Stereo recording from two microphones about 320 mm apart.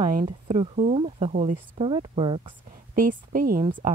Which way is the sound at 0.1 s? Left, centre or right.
Right.